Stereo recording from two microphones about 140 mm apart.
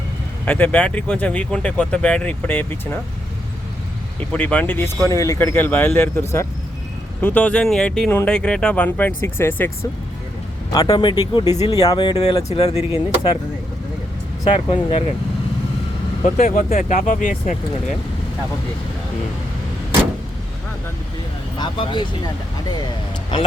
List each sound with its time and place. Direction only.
0.4 s speech: 10° left (ahead or behind)
4.2 s speech: 10° left (ahead or behind)
10.7 s speech: 25° left (ahead or behind)
12.2 s speech: 50° left (ahead or behind)
14.4 s speech: 40° left (ahead or behind)
16.2 s speech: 65° left (ahead or behind)
21.6 s speech: 35° left (ahead or behind)